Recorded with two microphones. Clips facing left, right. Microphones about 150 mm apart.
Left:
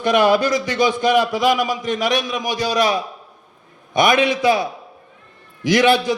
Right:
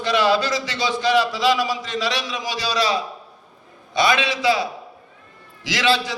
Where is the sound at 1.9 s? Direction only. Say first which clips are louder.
Left 5 dB; 50° left (ahead or behind).